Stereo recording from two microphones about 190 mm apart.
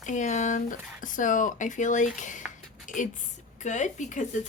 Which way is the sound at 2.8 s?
40° left (ahead or behind).